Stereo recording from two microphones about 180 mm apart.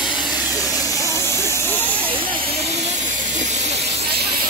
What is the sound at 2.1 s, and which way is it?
Hiss, 30° right (ahead or behind).